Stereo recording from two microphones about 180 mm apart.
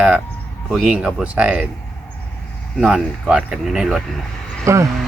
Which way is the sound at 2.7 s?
5° right (ahead or behind).